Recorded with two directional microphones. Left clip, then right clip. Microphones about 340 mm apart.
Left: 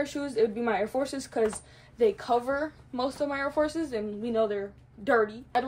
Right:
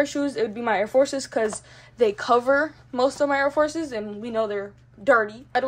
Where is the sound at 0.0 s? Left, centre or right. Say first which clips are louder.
Right 4 dB; right.